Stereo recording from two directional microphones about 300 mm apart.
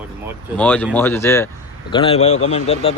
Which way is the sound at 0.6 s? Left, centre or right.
Centre.